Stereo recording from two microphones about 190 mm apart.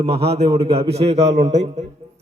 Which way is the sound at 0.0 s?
30° right (ahead or behind).